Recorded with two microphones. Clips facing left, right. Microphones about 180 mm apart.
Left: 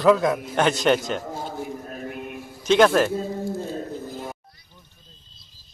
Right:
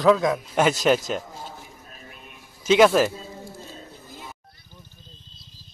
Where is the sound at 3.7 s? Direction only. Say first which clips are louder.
Left 12 dB; 55° left (ahead or behind).